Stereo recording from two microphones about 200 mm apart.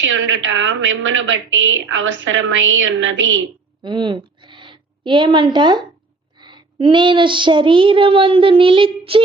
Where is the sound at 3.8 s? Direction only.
20° right (ahead or behind).